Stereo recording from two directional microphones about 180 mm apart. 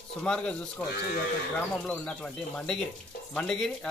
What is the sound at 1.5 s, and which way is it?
Speech, 5° left (ahead or behind).